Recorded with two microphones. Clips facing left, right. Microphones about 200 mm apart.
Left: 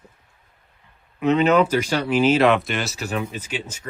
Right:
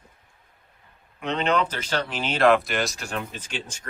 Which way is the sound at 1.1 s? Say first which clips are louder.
Left 7 dB; 5° left (ahead or behind).